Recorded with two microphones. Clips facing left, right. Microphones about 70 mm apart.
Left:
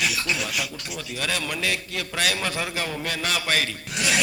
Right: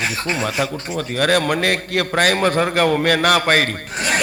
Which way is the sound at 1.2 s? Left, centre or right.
Right.